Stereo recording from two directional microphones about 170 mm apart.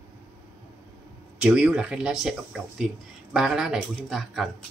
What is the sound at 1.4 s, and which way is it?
Speech, 5° right (ahead or behind).